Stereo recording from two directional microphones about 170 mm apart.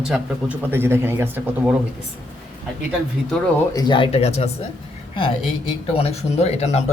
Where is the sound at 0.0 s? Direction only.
5° right (ahead or behind).